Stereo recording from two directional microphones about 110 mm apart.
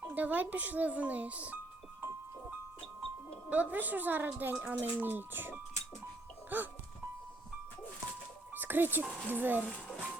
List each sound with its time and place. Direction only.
0.1 s speech: 15° right (ahead or behind)
3.5 s speech: 15° right (ahead or behind)
8.5 s speech: 20° right (ahead or behind)